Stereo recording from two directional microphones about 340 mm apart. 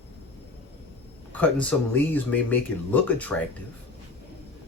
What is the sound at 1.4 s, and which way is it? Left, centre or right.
Speech, centre.